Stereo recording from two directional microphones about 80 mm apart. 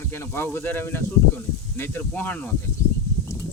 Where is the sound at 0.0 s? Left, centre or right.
Left.